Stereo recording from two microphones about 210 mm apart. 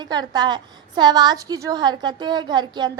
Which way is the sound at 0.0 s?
20° right (ahead or behind).